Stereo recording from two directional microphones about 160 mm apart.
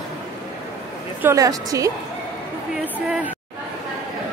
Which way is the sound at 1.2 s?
20° right (ahead or behind).